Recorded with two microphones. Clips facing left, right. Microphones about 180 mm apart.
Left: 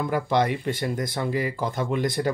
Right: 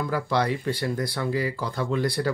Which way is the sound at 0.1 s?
20° left (ahead or behind).